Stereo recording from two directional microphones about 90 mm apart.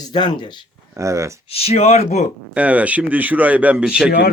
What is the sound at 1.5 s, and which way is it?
Speech, 90° left.